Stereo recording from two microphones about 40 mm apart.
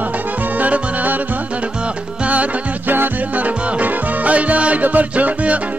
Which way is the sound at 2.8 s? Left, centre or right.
Right.